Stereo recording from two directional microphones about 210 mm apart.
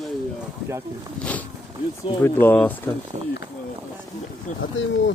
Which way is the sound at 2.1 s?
15° left (ahead or behind).